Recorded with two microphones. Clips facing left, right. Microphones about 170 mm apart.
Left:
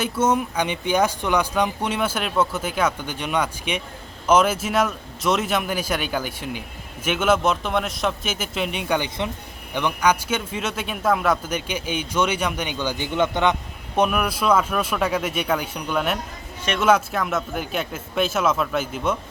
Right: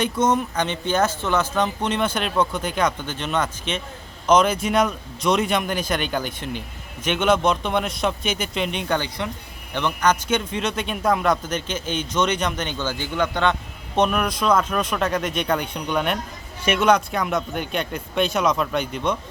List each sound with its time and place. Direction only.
0.0 s speech: 5° left (ahead or behind)
9.0 s speech: 20° left (ahead or behind)
9.7 s speech: 10° left (ahead or behind)